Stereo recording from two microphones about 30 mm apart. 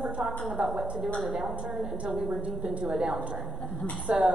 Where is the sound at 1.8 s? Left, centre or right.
Right.